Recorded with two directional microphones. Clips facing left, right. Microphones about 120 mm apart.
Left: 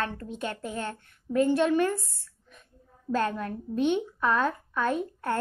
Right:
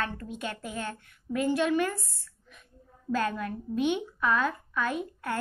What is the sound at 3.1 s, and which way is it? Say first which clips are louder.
A woman's voice: left 1 dB; 30° left (ahead or behind).